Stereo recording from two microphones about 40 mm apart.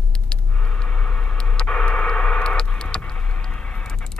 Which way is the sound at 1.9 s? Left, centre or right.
Left.